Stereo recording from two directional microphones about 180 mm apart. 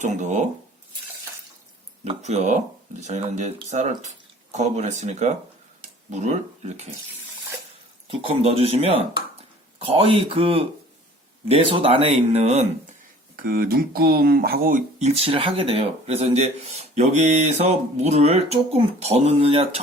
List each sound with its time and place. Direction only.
0.0 s speech: 40° right (ahead or behind)
2.0 s speech: 40° right (ahead or behind)
8.0 s speech: 30° right (ahead or behind)
13.3 s speech: 55° right (ahead or behind); by 19.8 s 35° right (ahead or behind)